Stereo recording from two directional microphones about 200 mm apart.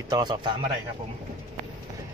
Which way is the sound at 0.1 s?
20° right (ahead or behind).